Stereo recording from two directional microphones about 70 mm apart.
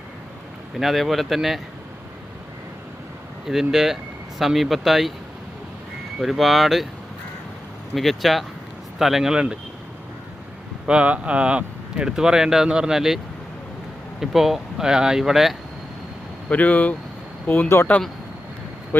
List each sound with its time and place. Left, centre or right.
0.8 s speech: centre
3.4 s speech: centre
6.1 s speech: centre
7.9 s speech: centre
10.8 s speech: centre
14.2 s speech: centre
16.5 s speech: left